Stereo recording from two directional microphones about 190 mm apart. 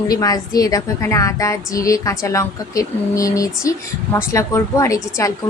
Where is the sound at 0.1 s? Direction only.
20° left (ahead or behind).